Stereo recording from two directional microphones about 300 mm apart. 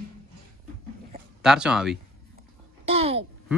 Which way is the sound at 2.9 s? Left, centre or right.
Centre.